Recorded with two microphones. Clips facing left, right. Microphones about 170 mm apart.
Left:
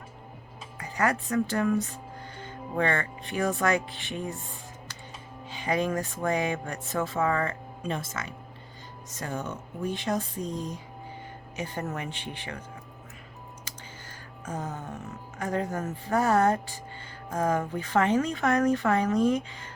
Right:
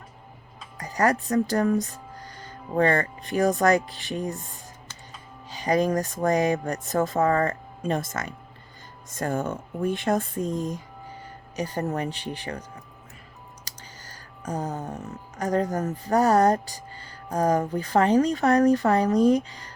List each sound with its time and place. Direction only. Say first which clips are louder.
0.8 s music: right 4 dB; 40° right (ahead or behind)
5.5 s music: right 5 dB; 40° right (ahead or behind)
9.1 s speech: right 7 dB; 50° right (ahead or behind)
11.5 s music: right 6 dB; 35° right (ahead or behind)
13.7 s clicking: left 1 dB; 40° right (ahead or behind)
14.4 s music: right 5 dB; 40° right (ahead or behind)